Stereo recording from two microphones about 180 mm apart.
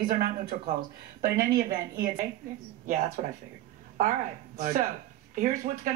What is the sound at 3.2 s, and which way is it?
Speech, 50° right (ahead or behind).